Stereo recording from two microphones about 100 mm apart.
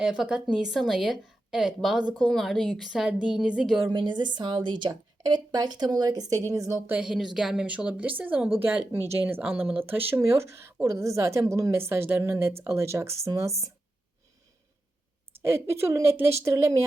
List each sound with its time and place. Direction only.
0.0 s a woman's voice: 10° right (ahead or behind)
3.9 s a woman's voice: 50° right (ahead or behind); by 6.7 s 30° right (ahead or behind)
7.0 s a woman's voice: 5° right (ahead or behind); by 13.7 s 30° right (ahead or behind)
15.4 s a woman's voice: 25° right (ahead or behind)